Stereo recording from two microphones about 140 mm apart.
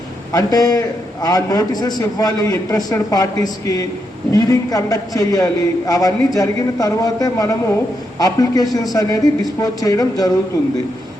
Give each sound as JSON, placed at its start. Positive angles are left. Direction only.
{"t": 0.3, "sound": "a man's voice", "side_deg": 25}